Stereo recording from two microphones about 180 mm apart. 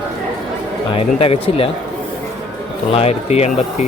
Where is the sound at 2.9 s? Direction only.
35° left (ahead or behind).